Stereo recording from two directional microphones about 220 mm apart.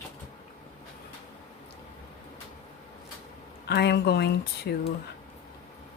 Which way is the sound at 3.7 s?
50° left (ahead or behind).